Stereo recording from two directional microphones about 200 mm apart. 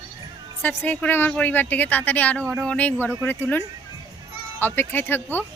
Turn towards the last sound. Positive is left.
turn(degrees=10)  # may be behind; listen again after turning